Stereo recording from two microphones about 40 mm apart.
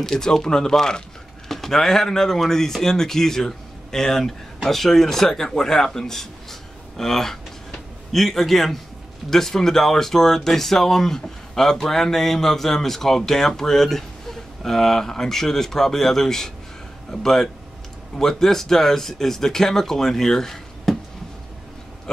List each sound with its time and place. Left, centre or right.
0.0 s speech: centre